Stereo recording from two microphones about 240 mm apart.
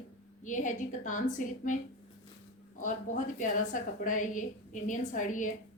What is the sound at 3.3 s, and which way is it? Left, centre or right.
A woman's voice, left.